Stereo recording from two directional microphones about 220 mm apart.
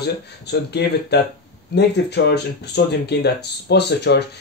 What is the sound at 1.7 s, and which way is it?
Speech, 50° left (ahead or behind).